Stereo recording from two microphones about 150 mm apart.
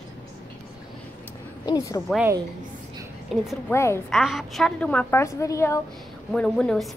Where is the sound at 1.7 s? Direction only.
20° left (ahead or behind).